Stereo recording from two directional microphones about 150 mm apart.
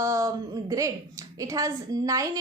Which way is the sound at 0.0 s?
20° right (ahead or behind).